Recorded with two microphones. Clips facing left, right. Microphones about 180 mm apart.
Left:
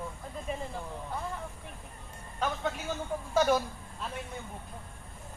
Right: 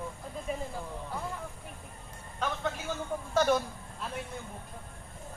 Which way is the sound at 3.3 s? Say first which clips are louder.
Even; 5° left (ahead or behind).